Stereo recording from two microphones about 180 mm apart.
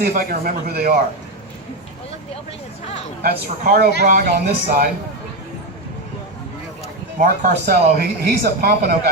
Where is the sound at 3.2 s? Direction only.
60° right (ahead or behind).